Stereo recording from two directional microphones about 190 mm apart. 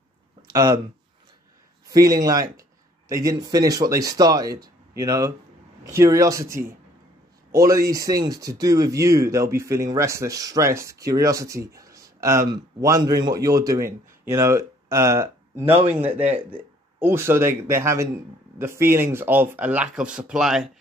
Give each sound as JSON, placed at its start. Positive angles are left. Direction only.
{"t": 0.5, "sound": "speech", "side_deg": -20}
{"t": 1.9, "sound": "speech", "side_deg": -20}
{"t": 15.6, "sound": "speech", "side_deg": -30}
{"t": 16.1, "sound": "speech", "side_deg": -10}